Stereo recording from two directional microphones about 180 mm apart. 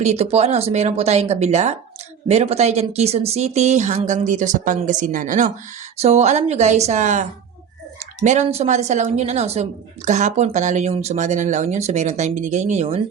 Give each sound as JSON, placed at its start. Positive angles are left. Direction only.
{"t": 0.0, "sound": "speech", "side_deg": -35}